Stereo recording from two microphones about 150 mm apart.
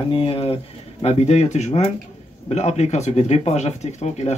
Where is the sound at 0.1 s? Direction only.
40° left (ahead or behind).